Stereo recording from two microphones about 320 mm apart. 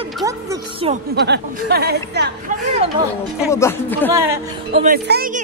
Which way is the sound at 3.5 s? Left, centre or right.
Centre.